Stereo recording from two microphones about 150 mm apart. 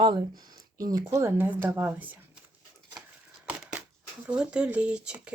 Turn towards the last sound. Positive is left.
turn(degrees=-5)  # may be behind; listen again after turning